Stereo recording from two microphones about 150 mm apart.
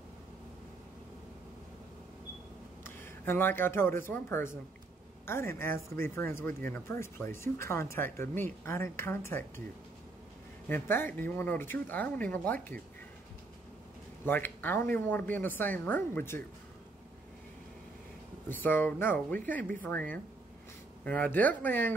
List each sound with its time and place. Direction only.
2.8 s speech: 15° left (ahead or behind)
10.7 s speech: 15° left (ahead or behind)
14.2 s speech: 15° left (ahead or behind)
18.5 s speech: 15° left (ahead or behind)